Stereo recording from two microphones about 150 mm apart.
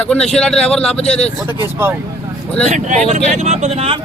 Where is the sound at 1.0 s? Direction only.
45° left (ahead or behind).